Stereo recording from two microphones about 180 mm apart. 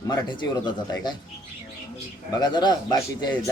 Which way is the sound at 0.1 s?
25° left (ahead or behind).